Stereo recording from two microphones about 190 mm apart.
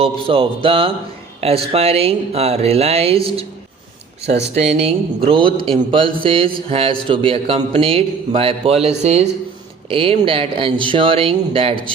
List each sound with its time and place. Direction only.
0.0 s a man's voice: 30° right (ahead or behind)
4.5 s a man's voice: 35° right (ahead or behind)